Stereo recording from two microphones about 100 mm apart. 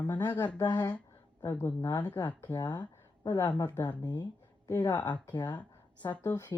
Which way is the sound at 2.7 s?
45° left (ahead or behind).